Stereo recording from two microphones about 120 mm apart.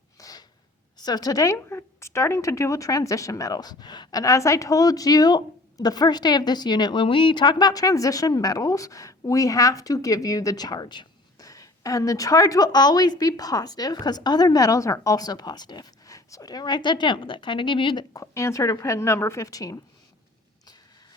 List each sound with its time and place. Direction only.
0.2 s a sound: 30° left (ahead or behind)
0.9 s speech: 35° left (ahead or behind)
18.1 s a woman's voice: 25° left (ahead or behind)